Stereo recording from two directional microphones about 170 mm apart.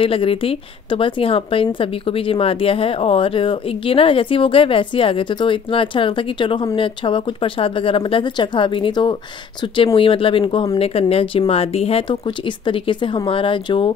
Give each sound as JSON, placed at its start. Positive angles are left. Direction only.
{"t": 0.0, "sound": "a woman's voice", "side_deg": 35}